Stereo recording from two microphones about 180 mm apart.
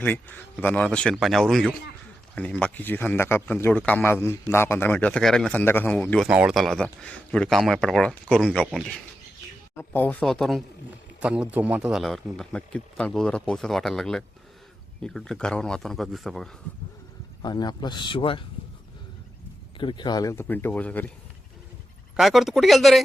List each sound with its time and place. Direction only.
0.0 s speech: 10° left (ahead or behind)
6.2 s speech: 5° right (ahead or behind)
17.4 s speech: 25° left (ahead or behind)
19.8 s speech: 25° left (ahead or behind); by 21.1 s 10° left (ahead or behind)
22.1 s speech: centre (ahead or behind)